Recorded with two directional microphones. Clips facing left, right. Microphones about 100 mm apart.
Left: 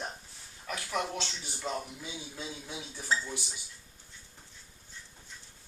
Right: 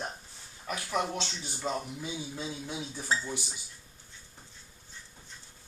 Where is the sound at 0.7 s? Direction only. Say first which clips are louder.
Right 2 dB; 5° right (ahead or behind).